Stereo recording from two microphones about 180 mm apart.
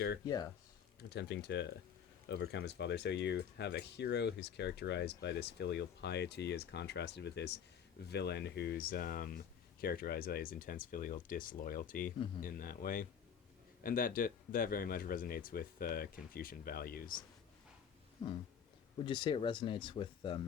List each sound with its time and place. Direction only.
0.3 s speech: 20° left (ahead or behind)
1.1 s speech: 70° left (ahead or behind); by 17.2 s 50° left (ahead or behind)
18.2 s speech: 30° left (ahead or behind)